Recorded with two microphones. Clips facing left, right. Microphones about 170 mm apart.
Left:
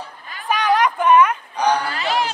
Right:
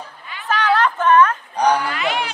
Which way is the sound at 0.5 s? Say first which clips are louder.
Even; 15° left (ahead or behind).